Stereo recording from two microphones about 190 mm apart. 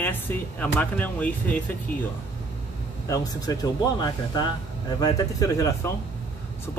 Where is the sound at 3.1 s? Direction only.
20° left (ahead or behind).